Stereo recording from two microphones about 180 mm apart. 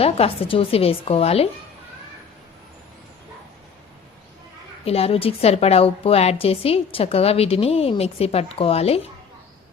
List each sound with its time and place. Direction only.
0.0 s a woman's voice: 30° left (ahead or behind)
4.9 s a woman's voice: 35° left (ahead or behind)